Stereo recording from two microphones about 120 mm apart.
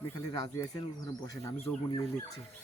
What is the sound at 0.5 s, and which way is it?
Speech, 25° left (ahead or behind).